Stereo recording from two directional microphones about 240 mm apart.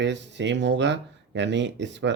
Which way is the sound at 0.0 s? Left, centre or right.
Right.